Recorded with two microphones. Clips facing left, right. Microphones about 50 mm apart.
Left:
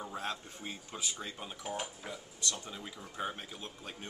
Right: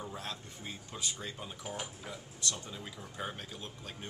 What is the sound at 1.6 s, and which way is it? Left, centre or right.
Speech, centre.